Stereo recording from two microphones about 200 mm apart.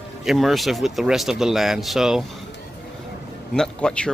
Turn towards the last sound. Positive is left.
turn(degrees=5)  # may be behind; listen again after turning